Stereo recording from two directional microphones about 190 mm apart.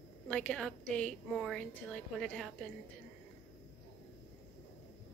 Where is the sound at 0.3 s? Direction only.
5° left (ahead or behind).